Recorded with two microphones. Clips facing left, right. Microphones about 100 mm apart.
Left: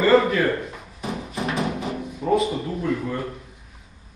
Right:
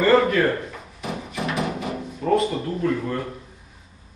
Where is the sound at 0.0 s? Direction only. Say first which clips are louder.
Even; 5° left (ahead or behind).